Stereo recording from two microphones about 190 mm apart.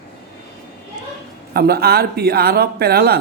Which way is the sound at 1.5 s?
55° right (ahead or behind).